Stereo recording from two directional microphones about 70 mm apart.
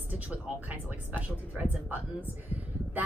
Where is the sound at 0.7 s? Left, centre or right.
Right.